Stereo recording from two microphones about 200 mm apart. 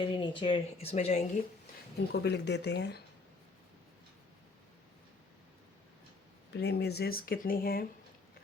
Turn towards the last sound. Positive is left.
turn(degrees=45)  # may be behind; listen again after turning